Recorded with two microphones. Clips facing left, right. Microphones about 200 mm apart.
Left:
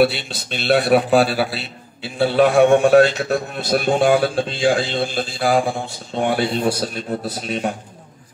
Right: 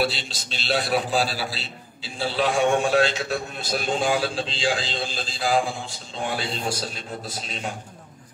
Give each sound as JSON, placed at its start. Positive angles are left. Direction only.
{"t": 0.0, "sound": "a man's voice", "side_deg": 60}